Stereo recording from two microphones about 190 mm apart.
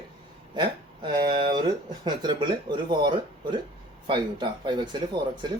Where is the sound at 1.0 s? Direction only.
25° right (ahead or behind).